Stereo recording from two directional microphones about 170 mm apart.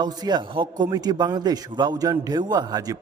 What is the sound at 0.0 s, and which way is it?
A man's voice, 25° right (ahead or behind).